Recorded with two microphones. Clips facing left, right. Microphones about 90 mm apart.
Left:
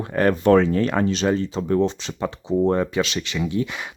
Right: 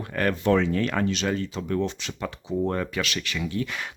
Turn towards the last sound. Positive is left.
turn(degrees=15)  # may be behind; listen again after turning